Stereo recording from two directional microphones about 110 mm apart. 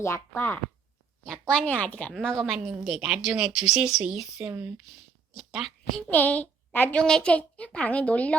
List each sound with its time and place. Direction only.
0.0 s speech: 25° left (ahead or behind)
1.3 s a woman's voice: 10° left (ahead or behind)
6.0 s a woman's voice: 15° left (ahead or behind)